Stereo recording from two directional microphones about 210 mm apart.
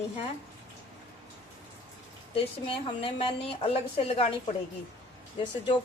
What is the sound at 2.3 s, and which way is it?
A woman's voice, 25° left (ahead or behind).